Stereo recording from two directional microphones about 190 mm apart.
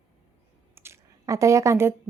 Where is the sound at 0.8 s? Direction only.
15° right (ahead or behind).